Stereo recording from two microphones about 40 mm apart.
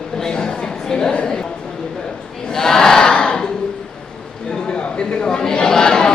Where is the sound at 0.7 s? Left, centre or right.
Centre.